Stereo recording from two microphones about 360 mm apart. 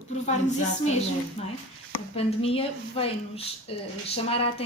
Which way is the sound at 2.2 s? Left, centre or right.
Centre.